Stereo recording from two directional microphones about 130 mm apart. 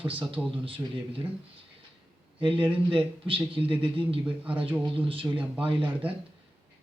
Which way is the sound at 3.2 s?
45° right (ahead or behind).